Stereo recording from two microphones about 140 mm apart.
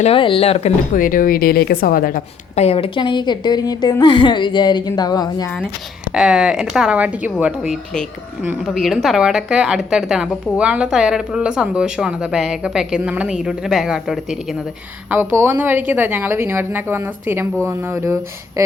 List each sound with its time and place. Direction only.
0.0 s speech: 40° left (ahead or behind)
0.9 s a woman's voice: 75° left (ahead or behind)
2.6 s a woman's voice: 45° left (ahead or behind); by 5.5 s 25° left (ahead or behind)
6.1 s a woman's voice: 5° right (ahead or behind)
15.1 s speech: 15° right (ahead or behind)